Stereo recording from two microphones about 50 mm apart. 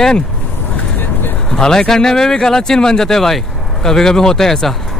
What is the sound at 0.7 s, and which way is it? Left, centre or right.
Vehicle, left.